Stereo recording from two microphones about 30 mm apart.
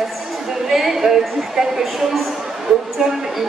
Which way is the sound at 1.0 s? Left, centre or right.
Centre.